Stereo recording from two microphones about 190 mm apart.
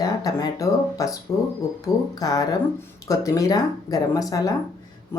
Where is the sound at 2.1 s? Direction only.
20° left (ahead or behind).